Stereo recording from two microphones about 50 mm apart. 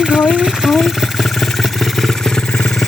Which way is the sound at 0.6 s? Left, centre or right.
Centre.